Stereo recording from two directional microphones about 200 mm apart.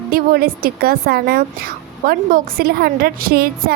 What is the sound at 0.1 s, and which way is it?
Speech, 50° right (ahead or behind).